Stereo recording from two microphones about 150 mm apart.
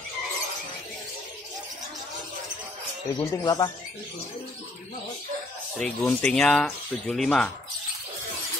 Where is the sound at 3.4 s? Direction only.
25° left (ahead or behind).